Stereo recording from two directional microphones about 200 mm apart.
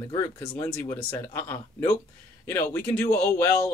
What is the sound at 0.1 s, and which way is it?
Speech, 15° left (ahead or behind).